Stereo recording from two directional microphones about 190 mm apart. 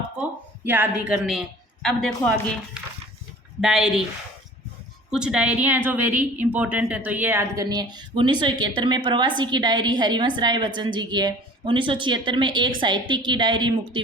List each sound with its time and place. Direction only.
0.2 s a woman's voice: 10° right (ahead or behind)
3.6 s speech: centre (ahead or behind)
5.1 s a woman's voice: 5° right (ahead or behind); by 14.0 s 25° right (ahead or behind)